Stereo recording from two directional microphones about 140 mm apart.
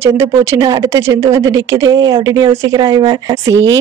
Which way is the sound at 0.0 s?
20° right (ahead or behind).